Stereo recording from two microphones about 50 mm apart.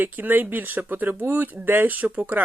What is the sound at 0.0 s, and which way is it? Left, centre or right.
Speech, right.